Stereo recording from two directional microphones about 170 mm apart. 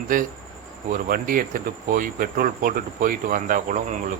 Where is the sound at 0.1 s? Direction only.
55° right (ahead or behind).